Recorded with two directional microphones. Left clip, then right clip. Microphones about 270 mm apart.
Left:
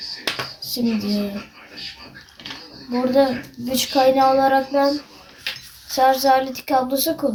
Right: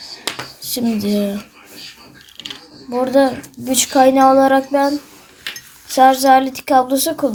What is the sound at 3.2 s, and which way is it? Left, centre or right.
A child's voice, right.